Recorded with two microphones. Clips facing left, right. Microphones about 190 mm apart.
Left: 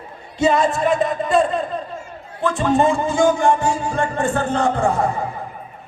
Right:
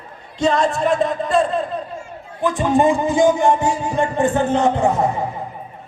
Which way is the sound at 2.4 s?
15° right (ahead or behind).